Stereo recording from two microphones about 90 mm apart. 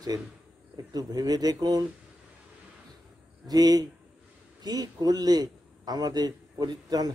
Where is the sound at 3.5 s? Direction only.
45° right (ahead or behind).